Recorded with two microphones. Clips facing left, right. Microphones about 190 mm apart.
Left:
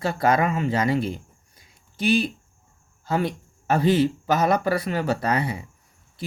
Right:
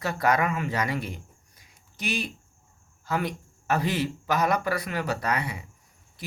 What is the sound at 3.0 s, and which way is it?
Speech, 30° left (ahead or behind).